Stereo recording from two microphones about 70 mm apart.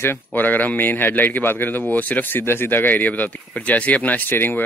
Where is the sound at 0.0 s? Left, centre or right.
Left.